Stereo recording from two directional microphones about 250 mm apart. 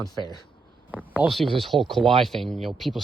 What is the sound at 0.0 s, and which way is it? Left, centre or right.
Speech, centre.